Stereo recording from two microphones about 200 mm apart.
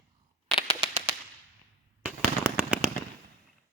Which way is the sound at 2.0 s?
10° right (ahead or behind).